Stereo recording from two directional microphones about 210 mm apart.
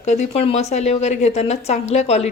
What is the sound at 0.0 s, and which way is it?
A woman's voice, 35° left (ahead or behind).